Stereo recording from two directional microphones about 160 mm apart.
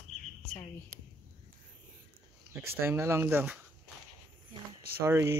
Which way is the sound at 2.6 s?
15° right (ahead or behind).